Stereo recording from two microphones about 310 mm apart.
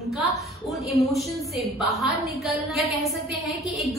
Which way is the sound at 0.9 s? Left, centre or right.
Centre.